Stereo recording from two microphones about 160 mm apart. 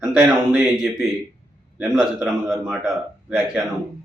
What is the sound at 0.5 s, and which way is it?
A man's voice, centre (ahead or behind).